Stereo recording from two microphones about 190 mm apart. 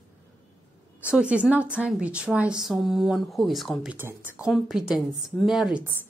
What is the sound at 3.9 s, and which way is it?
A woman's voice, 10° right (ahead or behind).